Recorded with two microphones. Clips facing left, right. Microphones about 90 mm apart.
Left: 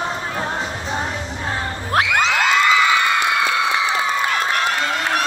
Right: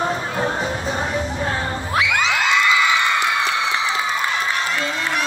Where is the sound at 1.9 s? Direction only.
45° left (ahead or behind).